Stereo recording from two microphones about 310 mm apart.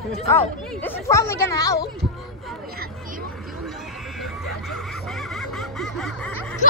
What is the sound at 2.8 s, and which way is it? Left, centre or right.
Speech, right.